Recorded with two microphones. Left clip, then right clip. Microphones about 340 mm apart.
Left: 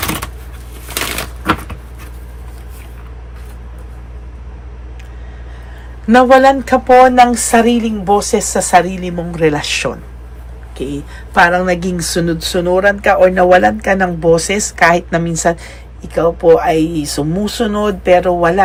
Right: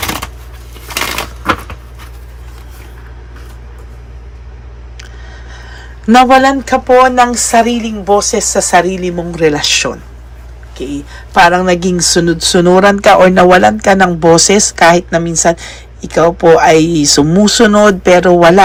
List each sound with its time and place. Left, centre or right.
6.1 s speech: centre